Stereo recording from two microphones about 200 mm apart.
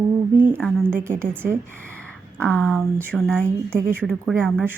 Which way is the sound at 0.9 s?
10° right (ahead or behind).